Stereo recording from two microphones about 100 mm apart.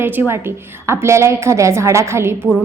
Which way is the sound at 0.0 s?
20° right (ahead or behind).